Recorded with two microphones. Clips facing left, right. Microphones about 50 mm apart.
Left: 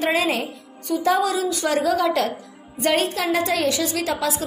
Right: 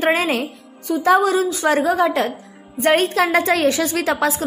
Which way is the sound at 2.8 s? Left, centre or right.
Right.